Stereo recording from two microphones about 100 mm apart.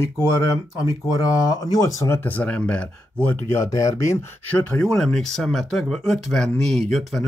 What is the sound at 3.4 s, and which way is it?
Speech, 30° left (ahead or behind).